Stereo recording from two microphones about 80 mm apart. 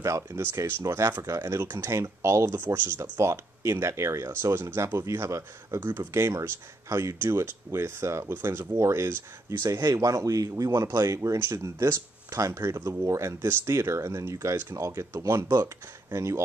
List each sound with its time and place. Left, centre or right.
0.0 s speech: right
2.5 s speech: right